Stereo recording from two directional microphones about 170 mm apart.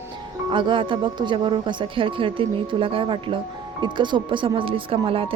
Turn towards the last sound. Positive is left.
turn(degrees=-35)  # may be behind; listen again after turning